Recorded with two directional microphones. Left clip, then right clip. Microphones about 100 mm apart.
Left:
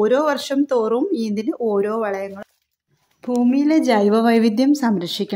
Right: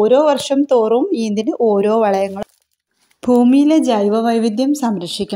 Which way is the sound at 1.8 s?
45° right (ahead or behind).